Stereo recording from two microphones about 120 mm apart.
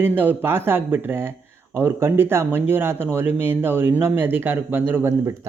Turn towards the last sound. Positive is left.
turn(degrees=-25)  # may be behind; listen again after turning